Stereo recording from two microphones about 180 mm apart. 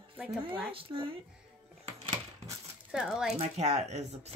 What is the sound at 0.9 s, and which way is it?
Speech, 25° right (ahead or behind).